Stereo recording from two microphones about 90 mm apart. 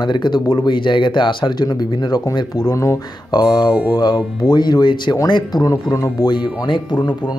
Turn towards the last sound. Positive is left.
turn(degrees=55)  # may be behind; listen again after turning